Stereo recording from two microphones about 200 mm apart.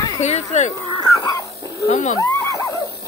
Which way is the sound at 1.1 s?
15° left (ahead or behind).